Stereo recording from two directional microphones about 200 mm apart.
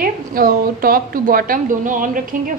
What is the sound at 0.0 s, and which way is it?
A woman's voice, 45° right (ahead or behind).